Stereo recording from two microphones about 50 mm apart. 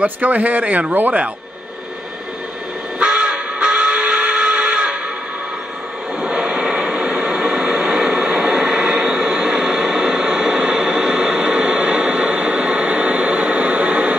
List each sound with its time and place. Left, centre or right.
0.0 s speech: right
3.0 s music: centre
6.2 s vehicle: centre
7.1 s a sound: centre